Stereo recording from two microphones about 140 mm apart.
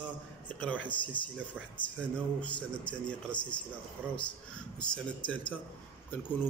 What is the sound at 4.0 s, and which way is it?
Speech, 15° right (ahead or behind).